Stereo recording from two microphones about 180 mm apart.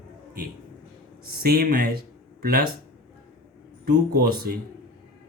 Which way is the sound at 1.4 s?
60° right (ahead or behind).